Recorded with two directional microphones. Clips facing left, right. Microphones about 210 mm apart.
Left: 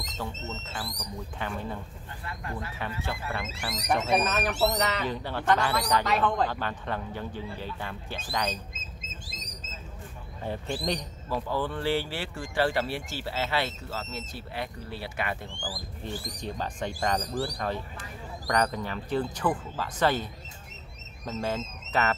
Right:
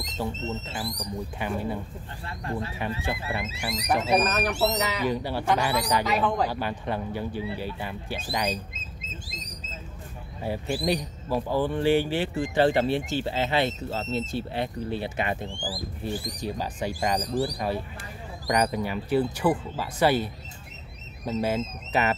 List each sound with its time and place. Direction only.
0.4 s speech: 25° right (ahead or behind)
3.0 s speech: 15° right (ahead or behind)
3.6 s speech: 5° right (ahead or behind)
10.4 s speech: 10° right (ahead or behind)
16.0 s speech: 5° right (ahead or behind)
21.3 s speech: 10° right (ahead or behind)